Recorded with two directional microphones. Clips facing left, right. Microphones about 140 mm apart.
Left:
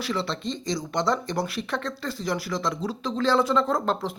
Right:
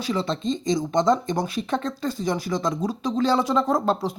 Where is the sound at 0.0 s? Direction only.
20° right (ahead or behind).